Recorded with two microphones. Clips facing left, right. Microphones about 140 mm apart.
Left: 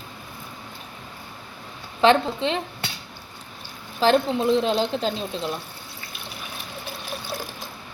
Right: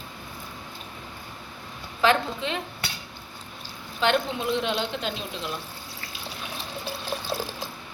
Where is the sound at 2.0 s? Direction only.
30° left (ahead or behind).